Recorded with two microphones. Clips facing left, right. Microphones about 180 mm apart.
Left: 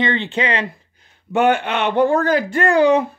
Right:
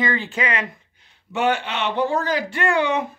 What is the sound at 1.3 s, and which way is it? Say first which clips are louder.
Speech: left 5 dB; 55° left (ahead or behind).